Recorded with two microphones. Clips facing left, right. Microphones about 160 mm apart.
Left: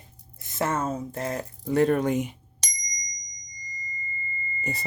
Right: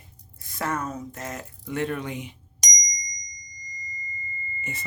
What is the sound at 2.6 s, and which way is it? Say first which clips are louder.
Bicycle bell: right 4 dB; 10° right (ahead or behind).